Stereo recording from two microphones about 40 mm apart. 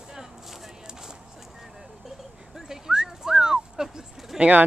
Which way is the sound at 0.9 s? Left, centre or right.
Centre.